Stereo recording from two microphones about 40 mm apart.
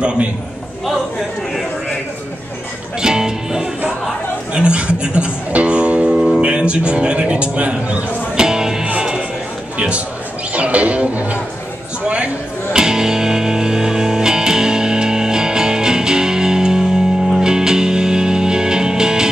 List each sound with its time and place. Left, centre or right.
0.0 s a man's voice: right
3.0 s music: centre
6.4 s speech: right
8.4 s music: centre
9.8 s speech: right
12.7 s music: centre